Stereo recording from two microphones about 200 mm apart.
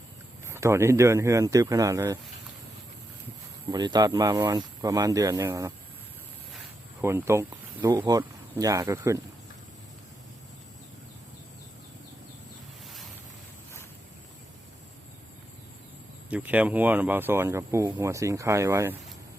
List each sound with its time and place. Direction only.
0.4 s speech: 15° right (ahead or behind)
3.7 s speech: 20° right (ahead or behind)
7.0 s speech: 15° right (ahead or behind)
16.3 s speech: 5° right (ahead or behind)